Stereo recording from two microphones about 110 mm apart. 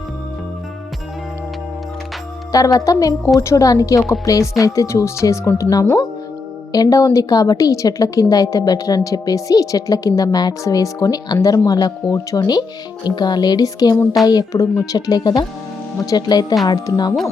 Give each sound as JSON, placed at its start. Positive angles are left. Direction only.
{"t": 2.5, "sound": "speech", "side_deg": 30}